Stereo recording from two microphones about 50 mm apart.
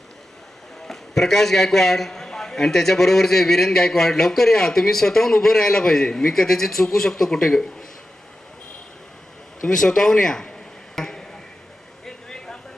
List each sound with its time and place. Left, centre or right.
0.9 s a man's voice: centre
9.6 s a man's voice: centre
10.9 s a sound: centre